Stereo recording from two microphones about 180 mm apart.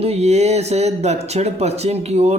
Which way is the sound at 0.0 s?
35° right (ahead or behind).